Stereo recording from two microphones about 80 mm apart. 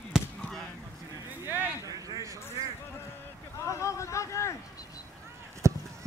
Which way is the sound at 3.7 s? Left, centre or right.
Left.